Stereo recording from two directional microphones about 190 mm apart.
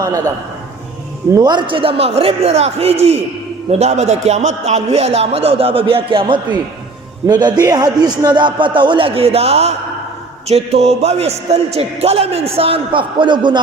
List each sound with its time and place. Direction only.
0.0 s a man's voice: 15° right (ahead or behind)
1.4 s a man's voice: 25° right (ahead or behind)